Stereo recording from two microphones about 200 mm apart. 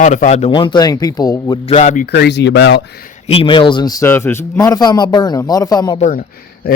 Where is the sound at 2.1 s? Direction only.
55° left (ahead or behind).